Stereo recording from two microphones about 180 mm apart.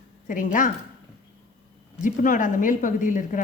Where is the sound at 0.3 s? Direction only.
45° left (ahead or behind).